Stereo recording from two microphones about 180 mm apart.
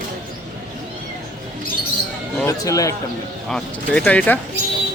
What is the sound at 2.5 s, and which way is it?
Speech, 20° left (ahead or behind).